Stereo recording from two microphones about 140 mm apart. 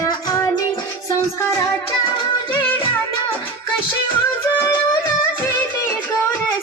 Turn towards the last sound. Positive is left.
turn(degrees=15)  # may be behind; listen again after turning